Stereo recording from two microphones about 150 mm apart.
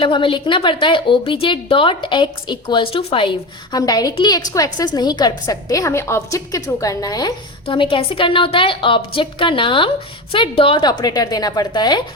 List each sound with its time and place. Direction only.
0.0 s a woman's voice: 35° left (ahead or behind)